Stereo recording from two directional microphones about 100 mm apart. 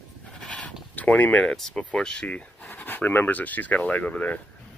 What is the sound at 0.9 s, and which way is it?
Speech, 15° left (ahead or behind).